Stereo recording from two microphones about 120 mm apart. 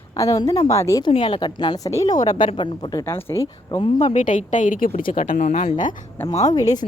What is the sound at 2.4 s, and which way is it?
Speech, 45° left (ahead or behind).